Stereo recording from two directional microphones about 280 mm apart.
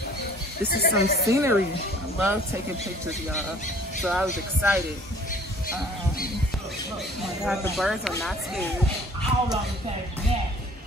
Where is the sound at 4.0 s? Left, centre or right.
Centre.